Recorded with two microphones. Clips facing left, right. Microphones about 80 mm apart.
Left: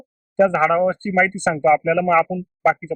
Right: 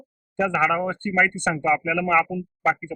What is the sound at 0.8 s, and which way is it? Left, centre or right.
Speech, centre.